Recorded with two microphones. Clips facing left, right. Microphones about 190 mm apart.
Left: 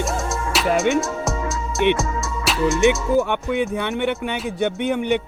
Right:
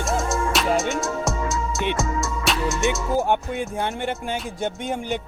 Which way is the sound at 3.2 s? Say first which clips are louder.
Left 3 dB; 65° left (ahead or behind).